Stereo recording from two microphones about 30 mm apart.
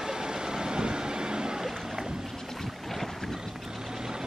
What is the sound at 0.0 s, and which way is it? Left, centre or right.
Vehicle, right.